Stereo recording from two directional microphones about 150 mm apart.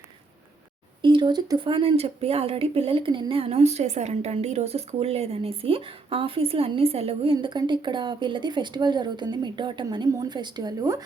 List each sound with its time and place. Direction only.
1.0 s speech: 30° right (ahead or behind)